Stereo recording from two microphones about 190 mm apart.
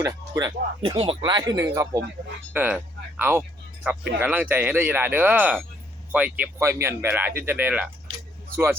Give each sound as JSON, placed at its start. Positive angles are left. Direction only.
{"t": 0.0, "sound": "speech", "side_deg": -20}